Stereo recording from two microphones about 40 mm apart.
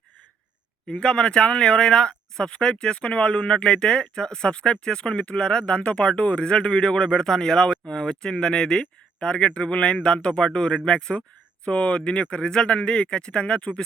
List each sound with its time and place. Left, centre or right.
0.9 s speech: left
6.8 s speech: centre